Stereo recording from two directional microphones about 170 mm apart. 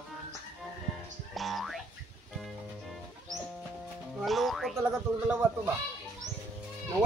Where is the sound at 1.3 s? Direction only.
Centre (ahead or behind).